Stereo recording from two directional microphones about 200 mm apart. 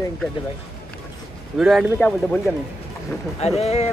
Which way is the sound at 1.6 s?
Centre (ahead or behind).